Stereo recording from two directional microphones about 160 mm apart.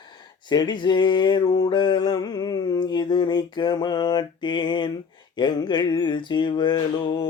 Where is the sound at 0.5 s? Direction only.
25° left (ahead or behind).